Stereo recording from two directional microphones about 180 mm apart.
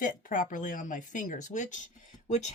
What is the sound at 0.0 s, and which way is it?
Speech, 50° left (ahead or behind).